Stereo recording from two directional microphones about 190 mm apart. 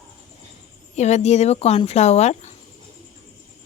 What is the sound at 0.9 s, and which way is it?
Speech, 35° left (ahead or behind).